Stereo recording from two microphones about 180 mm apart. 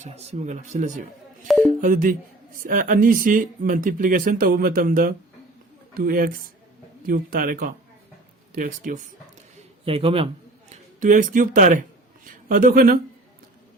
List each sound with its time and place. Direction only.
0.0 s speech: 35° right (ahead or behind)
9.8 s speech: 30° right (ahead or behind)
10.7 s speech: 45° right (ahead or behind)